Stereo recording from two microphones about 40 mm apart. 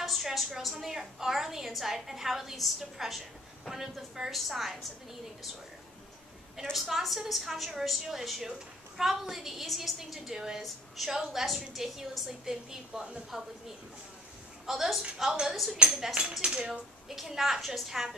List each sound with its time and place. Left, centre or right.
0.0 s a woman's voice: centre
6.5 s a woman's voice: centre
14.7 s a woman's voice: centre
17.1 s a woman's voice: centre